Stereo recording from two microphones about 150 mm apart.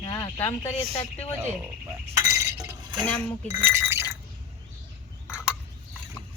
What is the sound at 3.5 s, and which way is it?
Speech, 15° right (ahead or behind).